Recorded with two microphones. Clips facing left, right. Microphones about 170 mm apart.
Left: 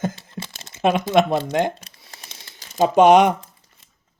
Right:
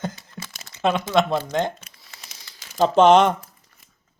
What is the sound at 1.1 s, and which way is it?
Speech, 20° left (ahead or behind).